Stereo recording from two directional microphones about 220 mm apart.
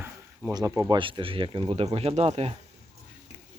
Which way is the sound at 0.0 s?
10° right (ahead or behind).